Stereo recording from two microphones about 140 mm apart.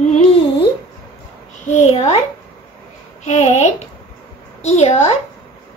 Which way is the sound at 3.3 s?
55° left (ahead or behind).